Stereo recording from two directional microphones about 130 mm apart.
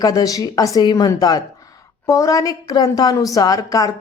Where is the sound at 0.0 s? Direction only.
30° left (ahead or behind).